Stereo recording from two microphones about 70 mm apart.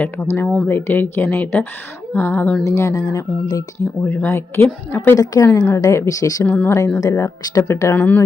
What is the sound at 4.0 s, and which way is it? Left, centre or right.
Speech, left.